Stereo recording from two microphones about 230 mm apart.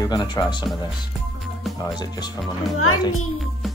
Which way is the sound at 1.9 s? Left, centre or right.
Centre.